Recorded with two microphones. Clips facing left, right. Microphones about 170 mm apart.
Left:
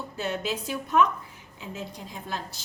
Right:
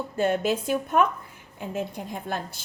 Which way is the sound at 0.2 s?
50° right (ahead or behind).